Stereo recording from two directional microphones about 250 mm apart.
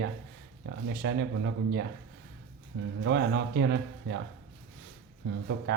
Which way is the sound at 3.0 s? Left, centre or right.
Right.